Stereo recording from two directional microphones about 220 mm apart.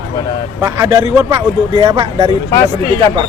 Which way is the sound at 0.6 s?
15° right (ahead or behind).